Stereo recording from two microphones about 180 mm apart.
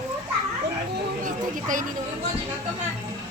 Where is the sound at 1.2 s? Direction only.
45° right (ahead or behind).